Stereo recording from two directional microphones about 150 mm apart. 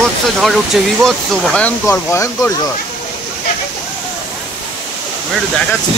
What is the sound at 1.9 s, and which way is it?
Speech, 20° left (ahead or behind).